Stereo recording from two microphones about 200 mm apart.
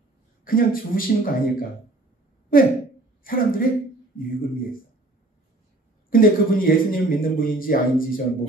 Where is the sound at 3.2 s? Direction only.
45° left (ahead or behind).